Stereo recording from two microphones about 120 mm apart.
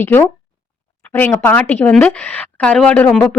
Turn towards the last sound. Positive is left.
turn(degrees=10)  # may be behind; listen again after turning